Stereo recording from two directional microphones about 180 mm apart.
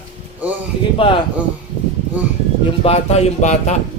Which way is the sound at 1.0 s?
30° left (ahead or behind).